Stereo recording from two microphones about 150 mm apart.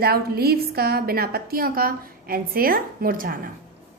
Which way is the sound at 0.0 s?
90° right.